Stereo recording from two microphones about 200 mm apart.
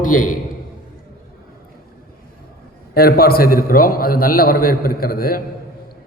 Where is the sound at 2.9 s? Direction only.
50° left (ahead or behind).